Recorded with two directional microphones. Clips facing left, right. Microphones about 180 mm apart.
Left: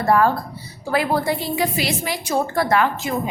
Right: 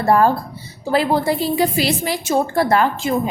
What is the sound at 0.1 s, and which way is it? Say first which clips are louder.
A woman's voice: right 2 dB; 30° right (ahead or behind).